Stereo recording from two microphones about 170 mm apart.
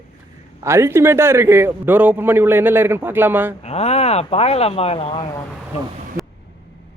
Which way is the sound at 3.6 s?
40° left (ahead or behind).